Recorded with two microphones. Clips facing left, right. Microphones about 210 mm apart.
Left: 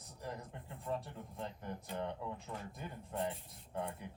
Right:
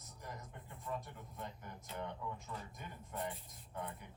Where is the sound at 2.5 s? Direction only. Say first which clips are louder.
Left 2 dB; 45° left (ahead or behind).